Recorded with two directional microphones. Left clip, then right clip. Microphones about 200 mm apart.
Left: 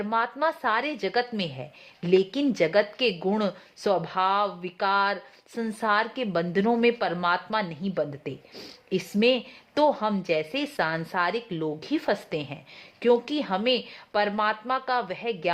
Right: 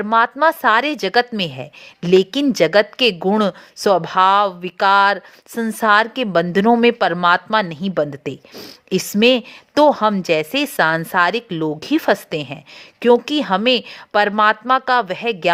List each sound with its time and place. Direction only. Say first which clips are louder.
0.0 s a woman's voice: right 11 dB; 30° right (ahead or behind)